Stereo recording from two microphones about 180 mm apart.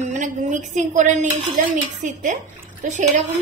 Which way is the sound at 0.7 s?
45° right (ahead or behind).